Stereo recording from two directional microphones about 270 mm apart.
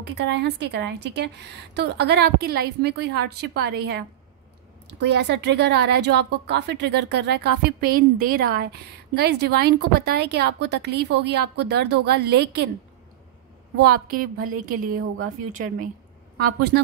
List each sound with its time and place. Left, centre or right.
0.0 s a woman's voice: right
13.7 s a woman's voice: right